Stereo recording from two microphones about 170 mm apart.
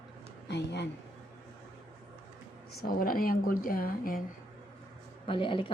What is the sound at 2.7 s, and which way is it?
Speech, 60° left (ahead or behind).